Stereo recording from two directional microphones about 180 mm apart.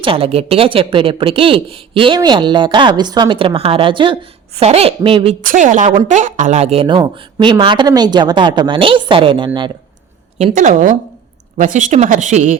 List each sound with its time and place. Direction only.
0.0 s a woman's voice: 30° right (ahead or behind)
5.4 s a woman's voice: 50° right (ahead or behind); by 9.5 s 30° right (ahead or behind)
10.3 s speech: 40° right (ahead or behind)